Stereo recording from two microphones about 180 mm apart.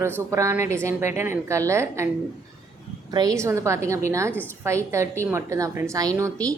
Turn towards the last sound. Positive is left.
turn(degrees=-20)  # may be behind; listen again after turning